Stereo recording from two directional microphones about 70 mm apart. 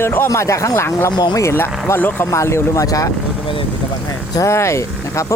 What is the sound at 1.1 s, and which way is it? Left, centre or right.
Speech, left.